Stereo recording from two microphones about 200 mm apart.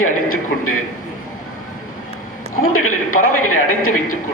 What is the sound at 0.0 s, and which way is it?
Speech, 90° left.